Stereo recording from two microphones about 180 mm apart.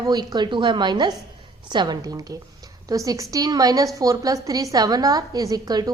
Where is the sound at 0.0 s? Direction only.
20° right (ahead or behind).